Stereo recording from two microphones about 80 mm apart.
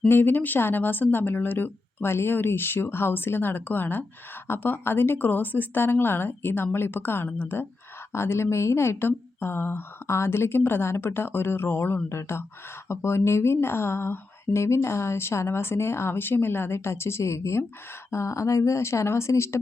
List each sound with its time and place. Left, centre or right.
0.1 s speech: left